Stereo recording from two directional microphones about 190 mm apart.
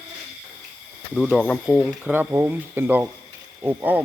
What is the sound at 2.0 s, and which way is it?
Speech, 10° right (ahead or behind).